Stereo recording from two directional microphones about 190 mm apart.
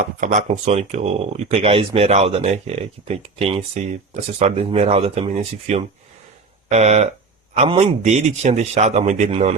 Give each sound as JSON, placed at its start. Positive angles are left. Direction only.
{"t": 0.2, "sound": "speech", "side_deg": -40}